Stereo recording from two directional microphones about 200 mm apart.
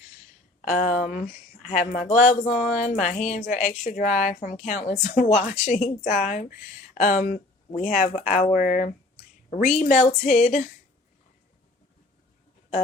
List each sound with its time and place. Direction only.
0.6 s speech: 40° left (ahead or behind)